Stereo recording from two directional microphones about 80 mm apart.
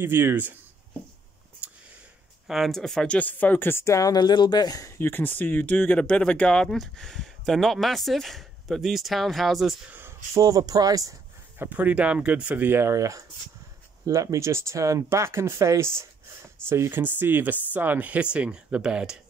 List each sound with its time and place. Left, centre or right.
0.0 s speech: right
1.6 s a sound: centre
2.4 s speech: centre
3.2 s speech: left
4.1 s speech: left
4.9 s speech: left; by 9.8 s centre
9.8 s a sound: right
10.3 s speech: right
11.5 s speech: right